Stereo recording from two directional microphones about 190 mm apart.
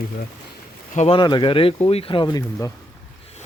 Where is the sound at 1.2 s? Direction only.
25° left (ahead or behind).